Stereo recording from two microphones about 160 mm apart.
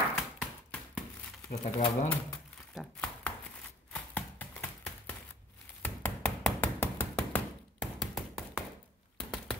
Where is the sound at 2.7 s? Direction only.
Centre (ahead or behind).